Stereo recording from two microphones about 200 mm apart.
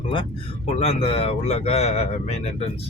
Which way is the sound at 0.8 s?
30° left (ahead or behind).